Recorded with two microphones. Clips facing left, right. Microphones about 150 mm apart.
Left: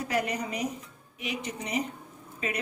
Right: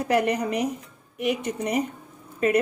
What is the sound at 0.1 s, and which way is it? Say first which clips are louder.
A woman's voice: right 9 dB; 60° right (ahead or behind).